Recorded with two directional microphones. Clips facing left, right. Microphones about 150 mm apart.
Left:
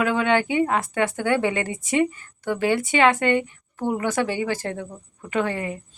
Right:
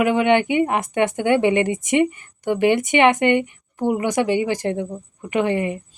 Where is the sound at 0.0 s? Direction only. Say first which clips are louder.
Right 4 dB; 15° right (ahead or behind).